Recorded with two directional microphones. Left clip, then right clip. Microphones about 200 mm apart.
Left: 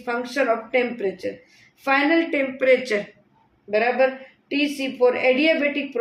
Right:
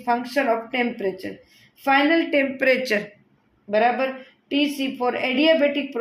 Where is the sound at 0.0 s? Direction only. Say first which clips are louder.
Right 1 dB; 30° right (ahead or behind).